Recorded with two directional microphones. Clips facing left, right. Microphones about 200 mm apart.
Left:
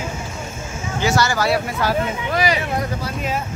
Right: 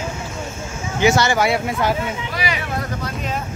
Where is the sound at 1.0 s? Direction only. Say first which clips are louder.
Right 3 dB; 20° right (ahead or behind).